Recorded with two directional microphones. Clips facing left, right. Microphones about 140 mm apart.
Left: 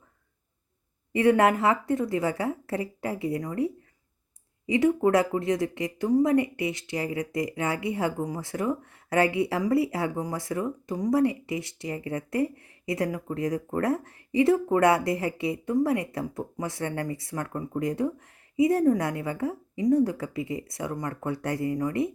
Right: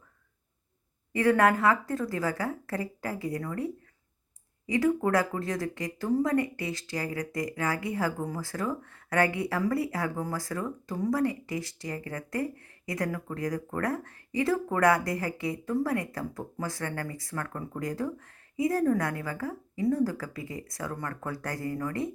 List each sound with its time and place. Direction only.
1.1 s speech: 25° left (ahead or behind)